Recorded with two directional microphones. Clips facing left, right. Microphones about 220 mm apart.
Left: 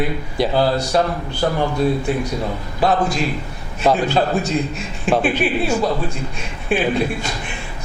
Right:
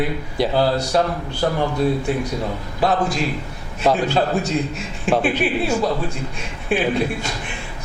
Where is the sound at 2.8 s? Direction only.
15° left (ahead or behind).